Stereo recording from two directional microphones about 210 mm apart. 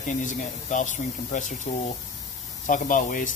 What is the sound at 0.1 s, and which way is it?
Speech, 35° left (ahead or behind).